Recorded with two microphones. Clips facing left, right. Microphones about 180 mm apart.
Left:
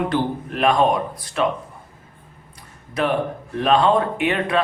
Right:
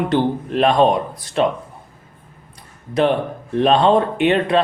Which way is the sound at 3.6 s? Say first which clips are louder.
Right 3 dB; 25° right (ahead or behind).